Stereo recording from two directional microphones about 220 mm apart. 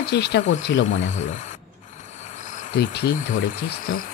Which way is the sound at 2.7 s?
50° left (ahead or behind).